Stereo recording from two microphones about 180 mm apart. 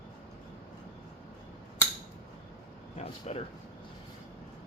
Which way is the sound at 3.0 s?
35° left (ahead or behind).